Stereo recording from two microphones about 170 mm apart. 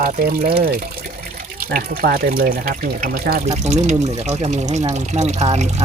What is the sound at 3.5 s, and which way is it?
Speech, 40° right (ahead or behind).